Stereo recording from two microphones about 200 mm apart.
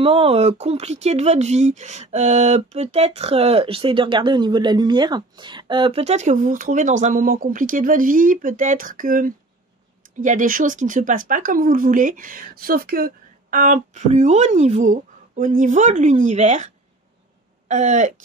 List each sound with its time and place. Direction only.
0.0 s speech: 30° right (ahead or behind)